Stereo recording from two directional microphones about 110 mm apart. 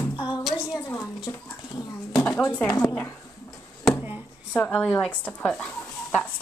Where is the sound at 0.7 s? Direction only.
25° left (ahead or behind).